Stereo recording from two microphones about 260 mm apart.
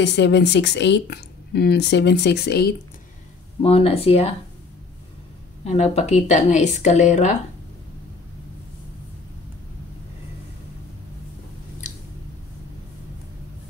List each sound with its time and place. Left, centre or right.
0.0 s speech: left
3.6 s speech: left
5.6 s speech: left